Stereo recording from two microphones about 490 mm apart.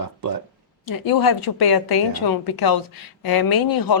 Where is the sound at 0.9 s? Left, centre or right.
Left.